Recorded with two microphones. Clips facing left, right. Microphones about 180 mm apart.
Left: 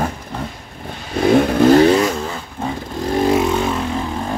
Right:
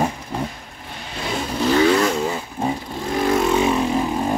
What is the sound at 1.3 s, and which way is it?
Vehicle, 60° left (ahead or behind).